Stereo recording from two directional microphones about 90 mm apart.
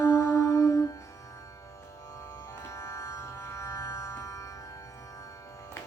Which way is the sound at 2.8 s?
30° left (ahead or behind).